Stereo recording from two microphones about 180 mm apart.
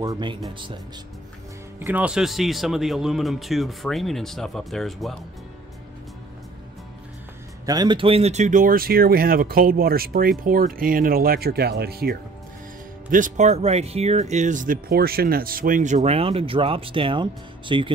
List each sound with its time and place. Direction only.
0.0 s speech: 25° right (ahead or behind)
1.8 s speech: 10° right (ahead or behind)
7.6 s speech: 20° right (ahead or behind); by 12.2 s 60° right (ahead or behind)
13.1 s speech: 45° right (ahead or behind); by 17.9 s 25° right (ahead or behind)